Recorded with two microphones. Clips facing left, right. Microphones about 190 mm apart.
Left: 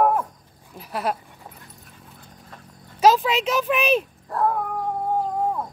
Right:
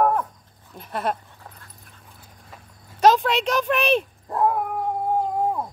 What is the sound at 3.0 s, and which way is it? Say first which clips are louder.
Speech: even; 5° left (ahead or behind).